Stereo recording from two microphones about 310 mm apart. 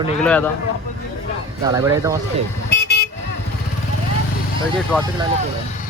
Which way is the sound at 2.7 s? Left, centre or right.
Left.